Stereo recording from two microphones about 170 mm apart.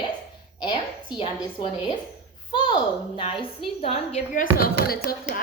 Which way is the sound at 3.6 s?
35° left (ahead or behind).